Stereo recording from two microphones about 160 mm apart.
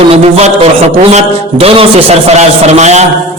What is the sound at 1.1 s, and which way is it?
A man's voice, 35° right (ahead or behind).